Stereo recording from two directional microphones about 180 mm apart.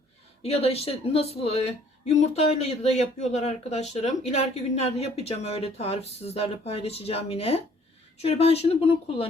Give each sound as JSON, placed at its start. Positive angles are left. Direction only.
{"t": 0.4, "sound": "a woman's voice", "side_deg": 35}